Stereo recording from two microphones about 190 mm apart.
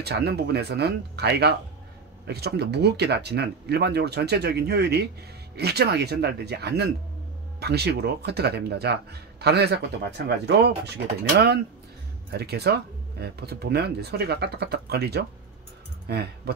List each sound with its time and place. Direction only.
0.0 s speech: 60° right (ahead or behind)